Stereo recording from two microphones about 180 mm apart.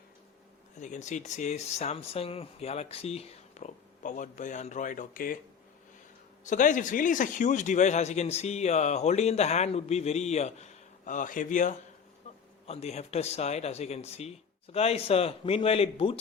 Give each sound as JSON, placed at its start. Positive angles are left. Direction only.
{"t": 0.8, "sound": "speech", "side_deg": 40}
{"t": 6.4, "sound": "speech", "side_deg": 45}
{"t": 12.3, "sound": "a sound", "side_deg": 40}
{"t": 12.6, "sound": "speech", "side_deg": 35}